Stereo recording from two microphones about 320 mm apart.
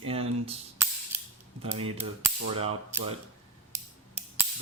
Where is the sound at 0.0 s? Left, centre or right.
Centre.